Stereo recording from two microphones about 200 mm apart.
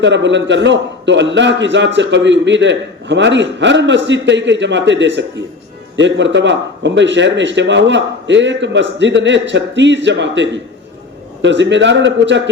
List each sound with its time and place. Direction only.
0.0 s a man's voice: 65° right (ahead or behind)